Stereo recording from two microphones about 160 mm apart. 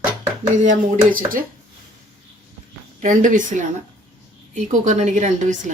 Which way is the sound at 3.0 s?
55° right (ahead or behind).